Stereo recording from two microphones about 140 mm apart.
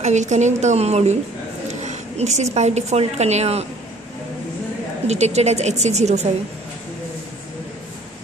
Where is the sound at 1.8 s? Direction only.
55° right (ahead or behind).